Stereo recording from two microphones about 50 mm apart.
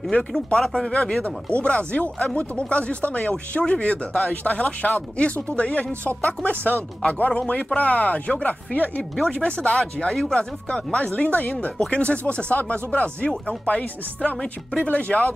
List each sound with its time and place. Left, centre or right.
0.3 s speech: centre
1.6 s speech: left
4.8 s speech: left